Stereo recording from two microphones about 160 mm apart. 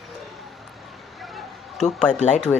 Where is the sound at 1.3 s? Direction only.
5° left (ahead or behind).